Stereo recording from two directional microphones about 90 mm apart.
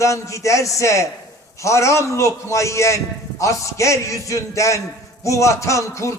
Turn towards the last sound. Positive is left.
turn(degrees=35)  # may be behind; listen again after turning